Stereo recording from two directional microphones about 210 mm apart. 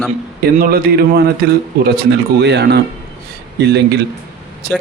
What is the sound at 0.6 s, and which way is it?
Speech, 45° right (ahead or behind).